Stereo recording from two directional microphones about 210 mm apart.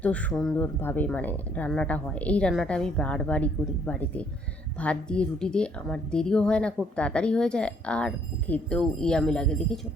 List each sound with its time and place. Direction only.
0.0 s a woman's voice: 5° left (ahead or behind)